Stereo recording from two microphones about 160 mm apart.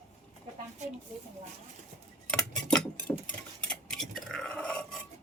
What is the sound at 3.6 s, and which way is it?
Dishes, 5° left (ahead or behind).